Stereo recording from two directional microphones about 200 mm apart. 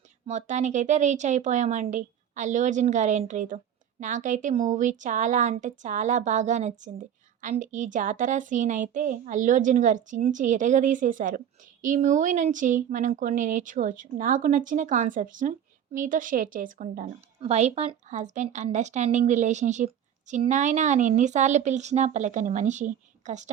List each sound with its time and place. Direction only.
0.3 s speech: 35° right (ahead or behind)